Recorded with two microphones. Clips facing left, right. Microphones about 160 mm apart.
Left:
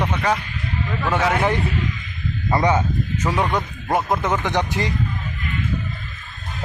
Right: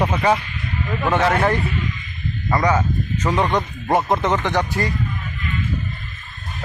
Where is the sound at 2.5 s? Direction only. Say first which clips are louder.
Even; 25° left (ahead or behind).